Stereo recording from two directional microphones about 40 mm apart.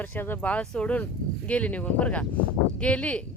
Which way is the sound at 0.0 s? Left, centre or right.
Left.